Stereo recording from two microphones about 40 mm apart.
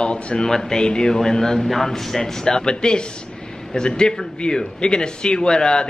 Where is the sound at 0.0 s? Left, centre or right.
Left.